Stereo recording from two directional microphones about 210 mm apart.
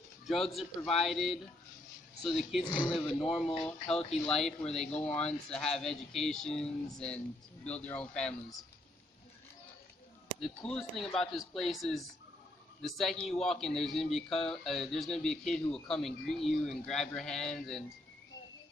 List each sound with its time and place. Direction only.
0.3 s speech: centre (ahead or behind)
2.6 s speech: 20° left (ahead or behind)
3.2 s speech: centre (ahead or behind)
10.4 s speech: centre (ahead or behind)